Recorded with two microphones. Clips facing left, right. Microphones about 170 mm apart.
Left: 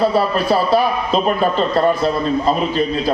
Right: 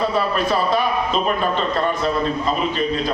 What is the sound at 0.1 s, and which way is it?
A man's voice, 35° left (ahead or behind).